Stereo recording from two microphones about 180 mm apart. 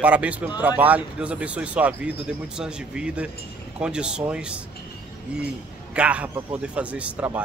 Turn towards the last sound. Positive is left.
turn(degrees=-10)  # may be behind; listen again after turning